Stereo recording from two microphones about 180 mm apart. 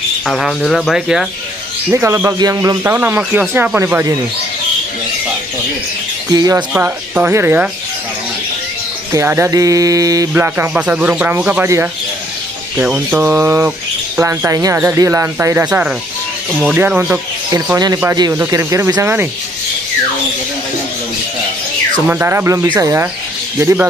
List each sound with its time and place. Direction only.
0.3 s speech: centre (ahead or behind)
1.9 s speech: 15° right (ahead or behind)
6.3 s speech: 20° right (ahead or behind)
9.1 s speech: 15° right (ahead or behind)
17.5 s speech: 20° right (ahead or behind)
22.0 s speech: 10° right (ahead or behind)